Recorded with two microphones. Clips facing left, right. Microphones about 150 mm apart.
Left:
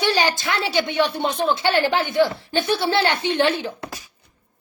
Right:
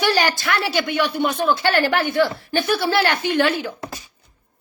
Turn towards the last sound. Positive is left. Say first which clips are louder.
# right 1 dB
turn(degrees=25)  # may be behind; listen again after turning